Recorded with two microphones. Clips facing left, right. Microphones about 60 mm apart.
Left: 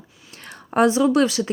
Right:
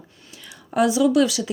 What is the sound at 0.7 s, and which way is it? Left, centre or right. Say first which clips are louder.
Speech: left 1 dB; left.